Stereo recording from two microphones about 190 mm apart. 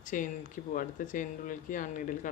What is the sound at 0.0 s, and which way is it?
Speech, 45° left (ahead or behind).